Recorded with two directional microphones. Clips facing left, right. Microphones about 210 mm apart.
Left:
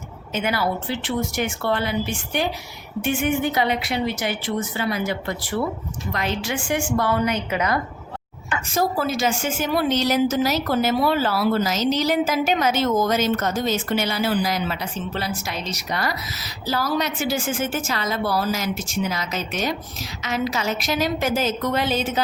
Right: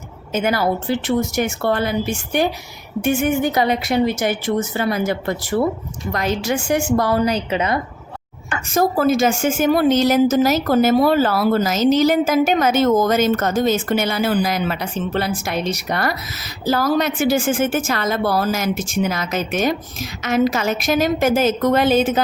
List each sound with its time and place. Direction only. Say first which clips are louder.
0.3 s a woman's voice: right 5 dB; 45° right (ahead or behind); by 7.8 s 25° right (ahead or behind)
8.4 s a woman's voice: right 4 dB; 45° right (ahead or behind)